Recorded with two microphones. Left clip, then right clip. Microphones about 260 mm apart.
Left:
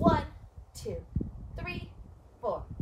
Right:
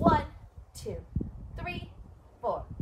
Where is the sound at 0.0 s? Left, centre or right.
Centre.